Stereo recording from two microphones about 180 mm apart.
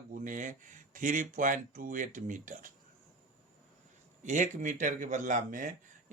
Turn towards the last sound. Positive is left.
turn(degrees=-45)  # may be behind; listen again after turning